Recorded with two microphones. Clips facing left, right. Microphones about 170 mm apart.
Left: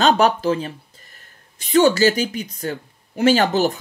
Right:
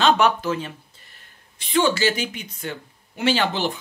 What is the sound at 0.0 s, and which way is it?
Speech, 35° left (ahead or behind).